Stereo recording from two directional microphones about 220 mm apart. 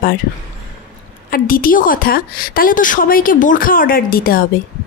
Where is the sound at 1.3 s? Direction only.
40° left (ahead or behind).